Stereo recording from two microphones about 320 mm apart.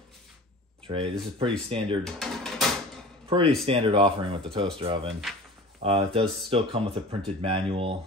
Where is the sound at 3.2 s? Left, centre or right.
Centre.